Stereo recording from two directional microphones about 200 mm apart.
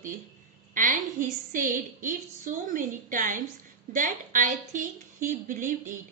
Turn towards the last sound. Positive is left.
turn(degrees=-40)  # may be behind; listen again after turning